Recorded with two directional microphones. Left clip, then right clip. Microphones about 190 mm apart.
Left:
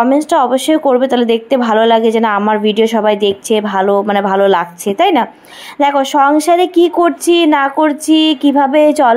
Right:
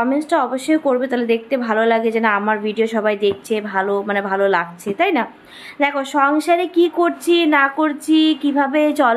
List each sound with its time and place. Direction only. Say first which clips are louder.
0.0 s speech: left 7 dB; 35° left (ahead or behind)